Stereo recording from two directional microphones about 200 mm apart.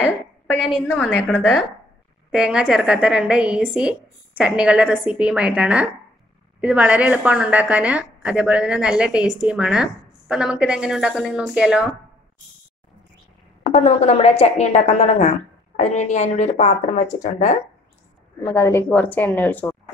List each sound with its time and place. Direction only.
0.8 s a woman's voice: 10° left (ahead or behind)
2.3 s a woman's voice: 5° right (ahead or behind)
13.7 s a woman's voice: 35° left (ahead or behind)
18.4 s a woman's voice: 15° left (ahead or behind)